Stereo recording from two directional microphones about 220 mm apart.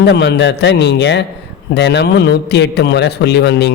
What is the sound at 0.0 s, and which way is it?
A man's voice, 50° left (ahead or behind).